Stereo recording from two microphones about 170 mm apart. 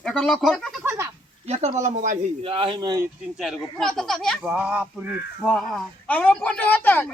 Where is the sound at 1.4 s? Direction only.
40° right (ahead or behind).